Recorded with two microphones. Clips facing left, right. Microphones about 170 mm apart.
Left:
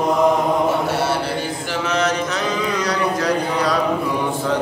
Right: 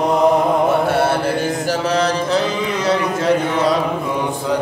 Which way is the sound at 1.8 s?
30° right (ahead or behind).